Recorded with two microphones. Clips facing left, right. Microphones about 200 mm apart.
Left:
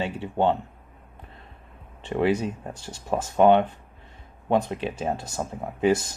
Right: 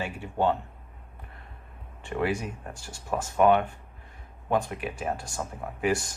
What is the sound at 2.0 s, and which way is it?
Speech, 20° left (ahead or behind).